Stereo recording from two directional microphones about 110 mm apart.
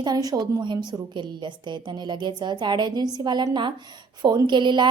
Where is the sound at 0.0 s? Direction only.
35° right (ahead or behind).